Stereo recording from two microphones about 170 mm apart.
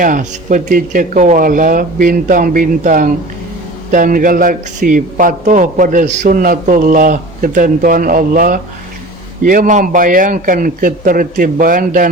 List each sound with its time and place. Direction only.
0.0 s a man's voice: 50° right (ahead or behind)